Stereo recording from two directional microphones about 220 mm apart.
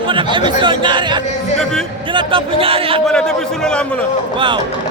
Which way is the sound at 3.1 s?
5° left (ahead or behind).